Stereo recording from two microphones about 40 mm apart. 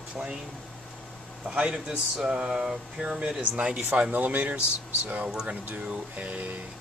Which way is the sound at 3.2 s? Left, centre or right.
Right.